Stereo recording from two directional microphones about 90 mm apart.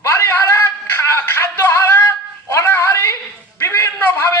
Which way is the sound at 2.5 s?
30° left (ahead or behind).